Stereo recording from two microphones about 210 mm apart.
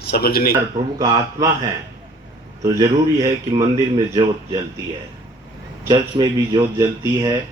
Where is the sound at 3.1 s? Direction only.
15° right (ahead or behind).